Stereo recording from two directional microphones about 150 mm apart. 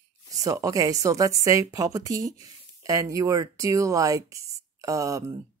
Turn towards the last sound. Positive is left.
turn(degrees=-20)  # may be behind; listen again after turning